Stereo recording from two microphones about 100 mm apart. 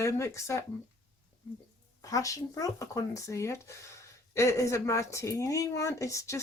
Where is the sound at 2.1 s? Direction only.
35° left (ahead or behind).